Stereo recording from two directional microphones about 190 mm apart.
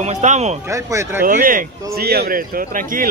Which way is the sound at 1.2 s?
45° right (ahead or behind).